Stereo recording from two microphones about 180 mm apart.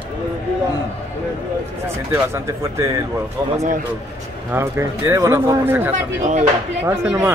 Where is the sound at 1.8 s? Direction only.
15° right (ahead or behind).